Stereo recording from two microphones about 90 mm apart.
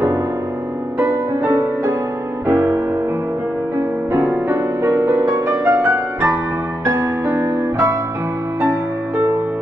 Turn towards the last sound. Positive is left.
turn(degrees=-35)  # may be behind; listen again after turning